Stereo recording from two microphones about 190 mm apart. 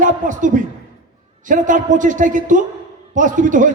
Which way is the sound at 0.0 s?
45° right (ahead or behind).